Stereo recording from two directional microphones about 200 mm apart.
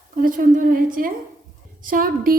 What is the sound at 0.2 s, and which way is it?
A woman's voice, 40° right (ahead or behind).